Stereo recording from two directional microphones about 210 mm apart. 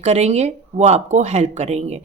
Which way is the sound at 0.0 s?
30° right (ahead or behind).